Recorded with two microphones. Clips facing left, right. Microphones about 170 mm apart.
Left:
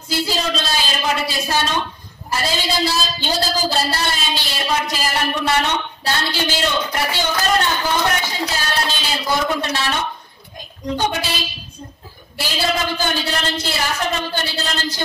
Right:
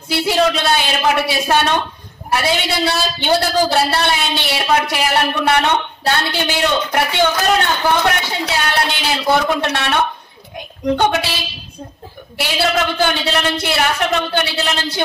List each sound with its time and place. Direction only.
0.1 s a woman's voice: 65° right (ahead or behind)
12.4 s speech: 65° right (ahead or behind)